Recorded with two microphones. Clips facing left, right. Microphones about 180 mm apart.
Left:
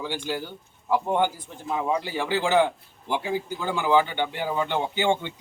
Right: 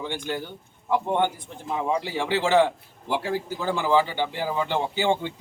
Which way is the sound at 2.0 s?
25° right (ahead or behind).